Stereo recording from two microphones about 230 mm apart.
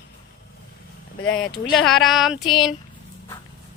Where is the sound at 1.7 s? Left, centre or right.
Centre.